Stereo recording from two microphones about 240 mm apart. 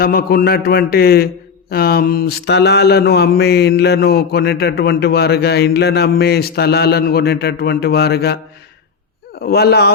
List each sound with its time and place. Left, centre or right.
0.0 s a man's voice: left
1.7 s mantra: left
9.4 s a man's voice: left